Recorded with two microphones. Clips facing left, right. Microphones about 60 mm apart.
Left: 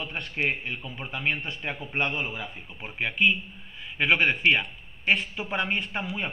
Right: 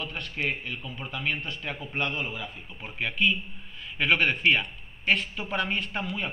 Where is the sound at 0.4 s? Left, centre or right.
Left.